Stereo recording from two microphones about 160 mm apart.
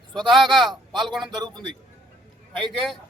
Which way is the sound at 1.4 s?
25° right (ahead or behind).